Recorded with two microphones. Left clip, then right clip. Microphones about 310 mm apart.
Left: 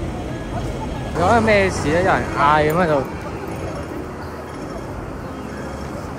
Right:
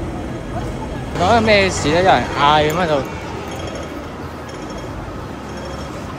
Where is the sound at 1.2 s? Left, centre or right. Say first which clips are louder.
Right 2 dB; centre.